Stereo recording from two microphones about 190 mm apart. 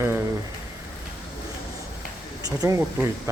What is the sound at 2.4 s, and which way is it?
Speech, 15° right (ahead or behind).